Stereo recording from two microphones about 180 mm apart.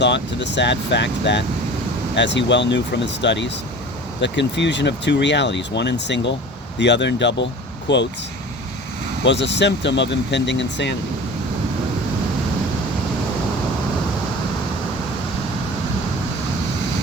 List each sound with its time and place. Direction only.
0.0 s speech: 75° left (ahead or behind)
9.2 s speech: 80° left